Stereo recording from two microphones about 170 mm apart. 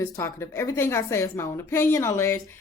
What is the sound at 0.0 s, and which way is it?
A woman's voice, 15° left (ahead or behind).